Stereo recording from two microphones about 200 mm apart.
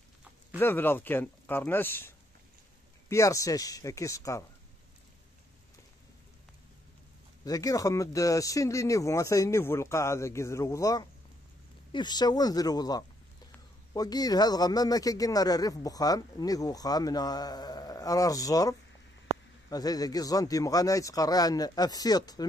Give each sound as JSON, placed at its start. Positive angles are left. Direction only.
{"t": 0.6, "sound": "speech", "side_deg": 10}
{"t": 7.4, "sound": "speech", "side_deg": 15}